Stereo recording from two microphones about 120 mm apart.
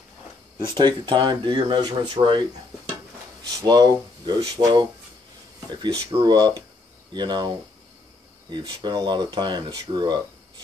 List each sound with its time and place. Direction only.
0.6 s speech: 40° right (ahead or behind)
3.4 s speech: 35° right (ahead or behind)